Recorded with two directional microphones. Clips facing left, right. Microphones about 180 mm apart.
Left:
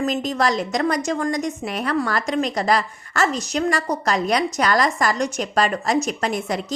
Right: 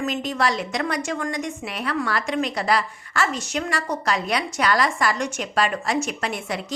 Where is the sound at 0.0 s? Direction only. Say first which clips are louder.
Left 3 dB; 40° left (ahead or behind).